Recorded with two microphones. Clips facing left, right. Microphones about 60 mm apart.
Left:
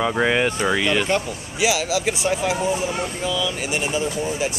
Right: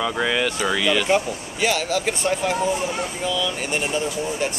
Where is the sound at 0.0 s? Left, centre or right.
Left.